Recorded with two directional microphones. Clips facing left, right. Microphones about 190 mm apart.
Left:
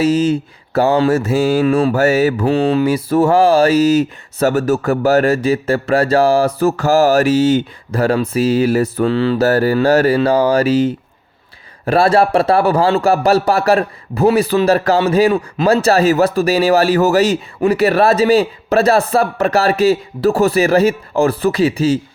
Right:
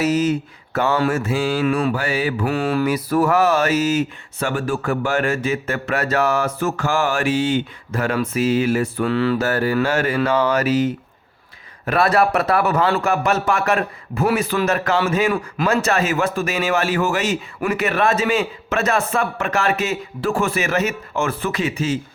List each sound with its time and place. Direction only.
0.0 s speech: 30° left (ahead or behind)
1.1 s mantra: 40° left (ahead or behind)
2.4 s speech: 25° left (ahead or behind)